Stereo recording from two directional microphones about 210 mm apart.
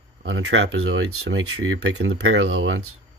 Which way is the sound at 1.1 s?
90° right.